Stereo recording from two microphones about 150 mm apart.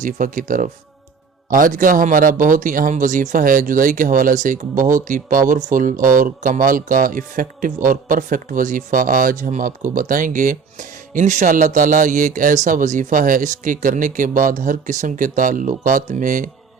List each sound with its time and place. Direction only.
0.0 s speech: 60° right (ahead or behind)